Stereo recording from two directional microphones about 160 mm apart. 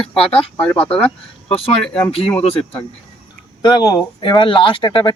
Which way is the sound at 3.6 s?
25° left (ahead or behind).